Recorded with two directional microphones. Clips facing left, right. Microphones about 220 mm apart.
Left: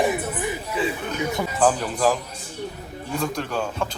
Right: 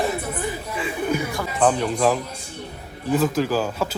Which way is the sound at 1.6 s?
Centre (ahead or behind).